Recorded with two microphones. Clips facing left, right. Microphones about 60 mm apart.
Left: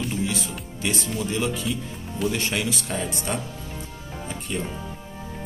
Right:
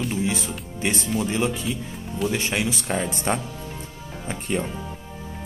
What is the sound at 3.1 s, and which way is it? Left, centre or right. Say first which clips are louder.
Speech: right 3 dB; right.